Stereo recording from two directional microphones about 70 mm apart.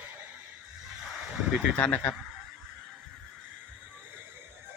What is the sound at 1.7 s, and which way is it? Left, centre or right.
Speech, left.